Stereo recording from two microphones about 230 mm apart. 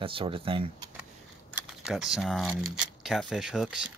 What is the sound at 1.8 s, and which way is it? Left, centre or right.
Speech, centre.